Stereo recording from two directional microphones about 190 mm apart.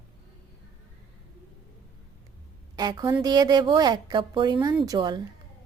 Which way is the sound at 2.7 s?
20° right (ahead or behind).